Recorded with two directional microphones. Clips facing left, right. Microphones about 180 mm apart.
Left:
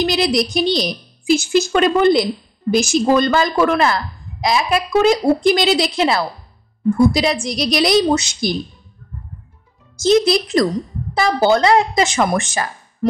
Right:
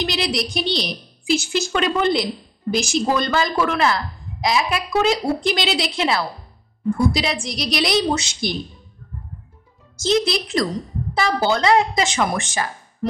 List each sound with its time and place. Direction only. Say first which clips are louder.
0.1 s speech: left 6 dB; 45° left (ahead or behind)
9.9 s speech: left 6 dB; 45° left (ahead or behind)